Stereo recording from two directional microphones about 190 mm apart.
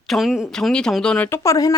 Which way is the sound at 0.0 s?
Centre (ahead or behind).